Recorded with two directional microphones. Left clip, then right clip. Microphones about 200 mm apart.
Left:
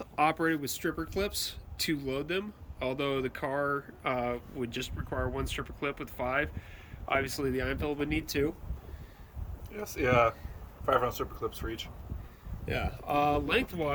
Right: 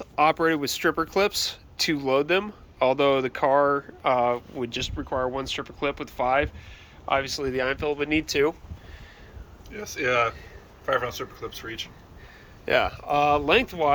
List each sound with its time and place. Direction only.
0.0 s speech: 5° left (ahead or behind)
9.7 s speech: 70° left (ahead or behind)
12.6 s speech: centre (ahead or behind)